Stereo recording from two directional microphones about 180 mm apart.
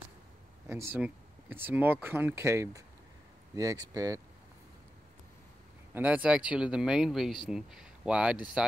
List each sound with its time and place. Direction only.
0.7 s speech: 15° right (ahead or behind)
5.9 s a man's voice: 10° right (ahead or behind)